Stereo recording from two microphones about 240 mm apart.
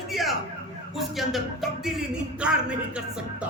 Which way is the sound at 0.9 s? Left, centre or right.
Centre.